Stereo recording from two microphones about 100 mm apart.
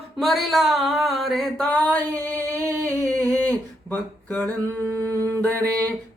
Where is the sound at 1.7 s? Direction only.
15° left (ahead or behind).